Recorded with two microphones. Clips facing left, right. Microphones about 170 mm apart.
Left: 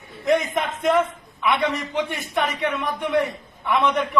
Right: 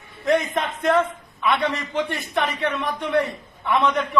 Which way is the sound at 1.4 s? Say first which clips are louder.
Even; 15° left (ahead or behind).